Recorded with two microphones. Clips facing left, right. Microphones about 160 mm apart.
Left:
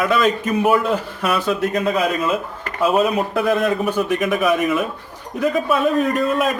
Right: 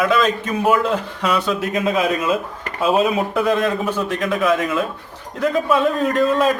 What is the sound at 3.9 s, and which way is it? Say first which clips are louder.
Speech: left 2 dB; 15° left (ahead or behind).